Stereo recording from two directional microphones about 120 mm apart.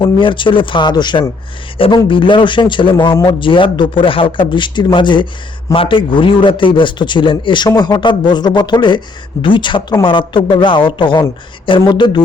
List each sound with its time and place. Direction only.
0.0 s a man's voice: 45° left (ahead or behind)